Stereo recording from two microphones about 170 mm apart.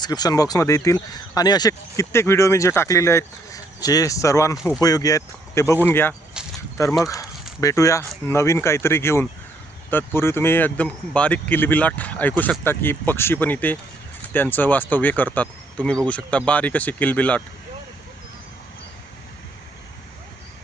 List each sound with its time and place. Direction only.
0.0 s speech: 25° left (ahead or behind)
6.4 s a sound: 5° right (ahead or behind)
7.0 s speech: 20° left (ahead or behind)